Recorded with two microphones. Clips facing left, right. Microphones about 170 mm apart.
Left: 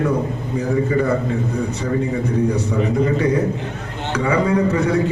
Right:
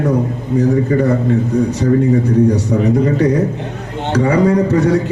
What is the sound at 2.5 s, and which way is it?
A man's voice, 40° right (ahead or behind).